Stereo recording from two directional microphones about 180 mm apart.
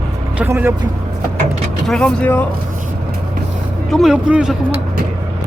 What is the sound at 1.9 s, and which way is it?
Speech, 5° left (ahead or behind).